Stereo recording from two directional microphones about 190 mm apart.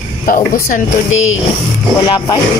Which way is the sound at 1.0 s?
90° left.